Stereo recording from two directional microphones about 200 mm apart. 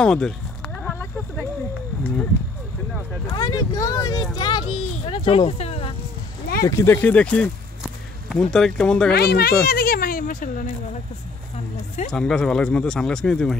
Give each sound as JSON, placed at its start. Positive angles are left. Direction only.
{"t": 0.0, "sound": "speech", "side_deg": 5}
{"t": 3.3, "sound": "a child's voice", "side_deg": 20}
{"t": 6.6, "sound": "speech", "side_deg": 15}
{"t": 7.8, "sound": "a sound", "side_deg": 0}
{"t": 9.1, "sound": "speech", "side_deg": 50}
{"t": 12.1, "sound": "speech", "side_deg": 5}